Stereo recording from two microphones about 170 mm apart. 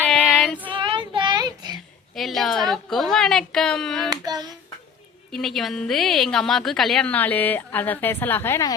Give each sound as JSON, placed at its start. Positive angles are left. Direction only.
{"t": 0.0, "sound": "child singing", "side_deg": 5}
{"t": 0.7, "sound": "child singing", "side_deg": -30}
{"t": 2.1, "sound": "a woman's voice", "side_deg": 0}
{"t": 4.1, "sound": "hands", "side_deg": -25}
{"t": 5.3, "sound": "a woman's voice", "side_deg": 0}